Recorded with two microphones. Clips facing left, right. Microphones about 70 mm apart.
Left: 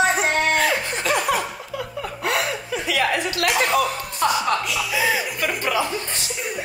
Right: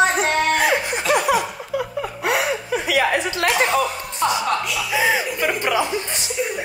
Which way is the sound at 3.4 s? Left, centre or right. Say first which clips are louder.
Right 1 dB; right.